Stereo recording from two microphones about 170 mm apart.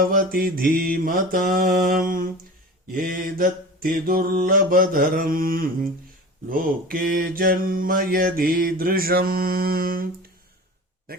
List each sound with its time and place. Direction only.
0.0 s mantra: 60° right (ahead or behind)